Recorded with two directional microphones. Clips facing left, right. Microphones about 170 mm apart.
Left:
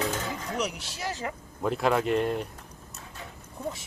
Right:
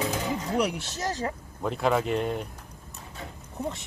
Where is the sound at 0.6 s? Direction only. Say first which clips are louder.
Right 5 dB; 55° right (ahead or behind).